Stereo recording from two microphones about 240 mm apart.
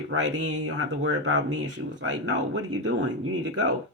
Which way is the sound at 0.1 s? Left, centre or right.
Right.